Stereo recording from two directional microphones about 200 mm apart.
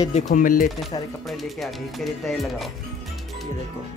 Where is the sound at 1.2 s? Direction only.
Centre (ahead or behind).